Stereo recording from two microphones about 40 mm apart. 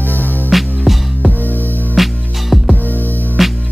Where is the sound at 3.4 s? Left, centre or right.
Centre.